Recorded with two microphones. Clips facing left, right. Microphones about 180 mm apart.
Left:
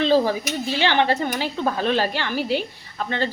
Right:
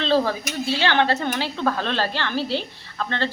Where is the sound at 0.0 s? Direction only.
15° left (ahead or behind).